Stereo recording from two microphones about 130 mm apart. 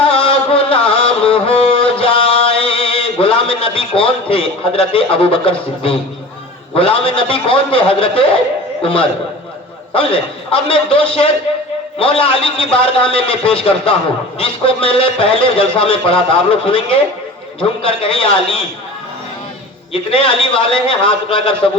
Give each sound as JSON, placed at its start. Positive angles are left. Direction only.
{"t": 0.0, "sound": "music", "side_deg": 45}
{"t": 6.7, "sound": "a man's voice", "side_deg": 45}
{"t": 19.9, "sound": "a man's voice", "side_deg": 45}